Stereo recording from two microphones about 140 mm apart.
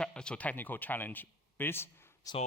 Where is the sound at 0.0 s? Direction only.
5° left (ahead or behind).